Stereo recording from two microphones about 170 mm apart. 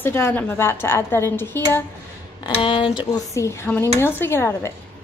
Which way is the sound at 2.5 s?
30° left (ahead or behind).